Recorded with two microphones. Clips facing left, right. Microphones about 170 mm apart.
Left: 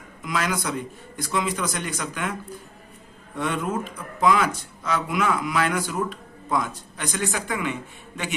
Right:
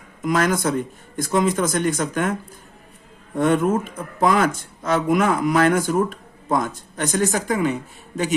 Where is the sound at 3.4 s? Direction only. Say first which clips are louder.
Right 8 dB; 45° right (ahead or behind).